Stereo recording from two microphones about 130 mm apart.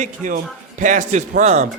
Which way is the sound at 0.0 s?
75° right (ahead or behind).